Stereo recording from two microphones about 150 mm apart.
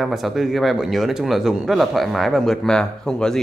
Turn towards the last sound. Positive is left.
turn(degrees=5)  # may be behind; listen again after turning